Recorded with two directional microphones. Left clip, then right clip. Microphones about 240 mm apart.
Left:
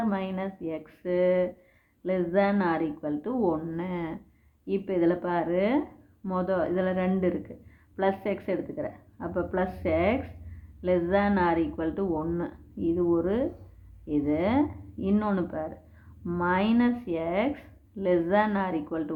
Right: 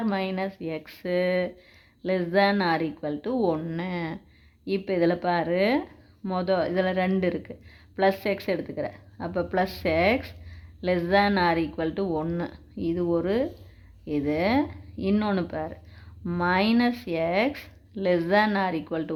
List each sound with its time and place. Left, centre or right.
0.0 s speech: right